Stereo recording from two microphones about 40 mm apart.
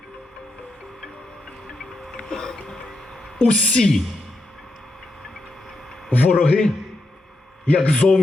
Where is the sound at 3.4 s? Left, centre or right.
Left.